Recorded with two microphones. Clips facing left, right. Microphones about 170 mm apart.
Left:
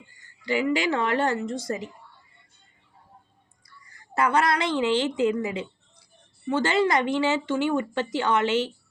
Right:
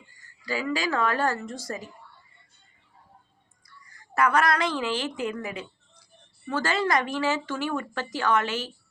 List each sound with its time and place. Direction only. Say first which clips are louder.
0.4 s speech: left 4 dB; 25° left (ahead or behind)
4.1 s speech: even; 25° left (ahead or behind)